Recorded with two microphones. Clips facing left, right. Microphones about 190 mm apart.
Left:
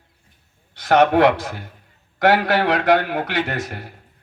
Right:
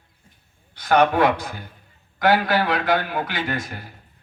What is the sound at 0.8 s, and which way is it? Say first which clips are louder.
A man's voice: left 3 dB; 80° left.